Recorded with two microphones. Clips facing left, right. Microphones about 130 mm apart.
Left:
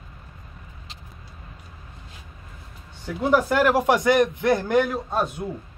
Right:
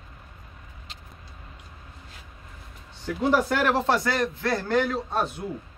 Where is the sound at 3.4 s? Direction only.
10° left (ahead or behind).